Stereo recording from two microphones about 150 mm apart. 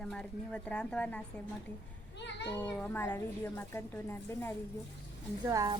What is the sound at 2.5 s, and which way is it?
A child's voice, 10° left (ahead or behind).